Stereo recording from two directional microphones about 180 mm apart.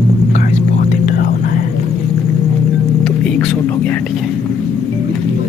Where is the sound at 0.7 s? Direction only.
55° left (ahead or behind).